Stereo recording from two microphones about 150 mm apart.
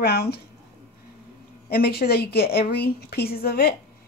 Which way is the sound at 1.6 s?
90° left.